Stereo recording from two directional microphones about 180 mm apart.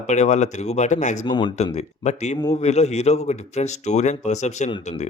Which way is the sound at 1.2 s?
25° left (ahead or behind).